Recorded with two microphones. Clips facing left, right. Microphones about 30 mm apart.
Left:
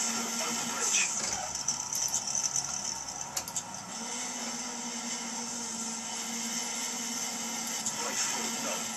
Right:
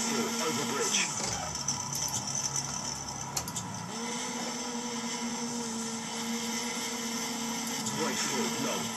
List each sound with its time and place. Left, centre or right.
0.0 s music: right
6.3 s vehicle: right
8.0 s vehicle: right